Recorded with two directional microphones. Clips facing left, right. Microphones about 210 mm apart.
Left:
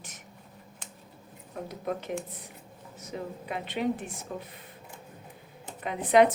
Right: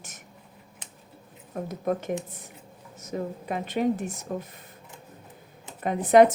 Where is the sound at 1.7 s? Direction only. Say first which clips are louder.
Right 5 dB; 45° right (ahead or behind).